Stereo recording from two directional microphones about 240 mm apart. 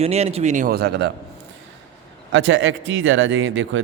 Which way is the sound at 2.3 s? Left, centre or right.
Right.